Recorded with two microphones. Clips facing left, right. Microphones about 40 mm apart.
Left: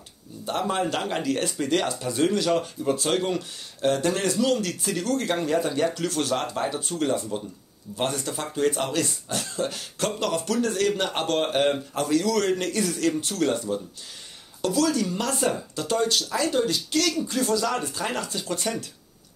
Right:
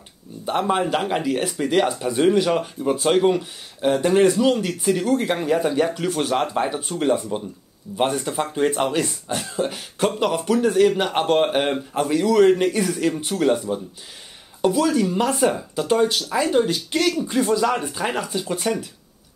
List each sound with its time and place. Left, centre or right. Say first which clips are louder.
0.5 s speech: right 5 dB; right